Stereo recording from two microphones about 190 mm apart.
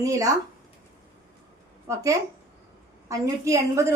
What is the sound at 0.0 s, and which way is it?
Speech, 15° right (ahead or behind).